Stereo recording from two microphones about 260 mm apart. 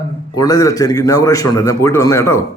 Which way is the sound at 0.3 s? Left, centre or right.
Centre.